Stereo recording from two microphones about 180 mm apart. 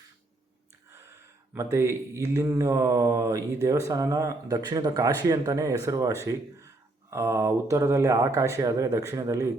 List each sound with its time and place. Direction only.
1.5 s speech: 15° right (ahead or behind)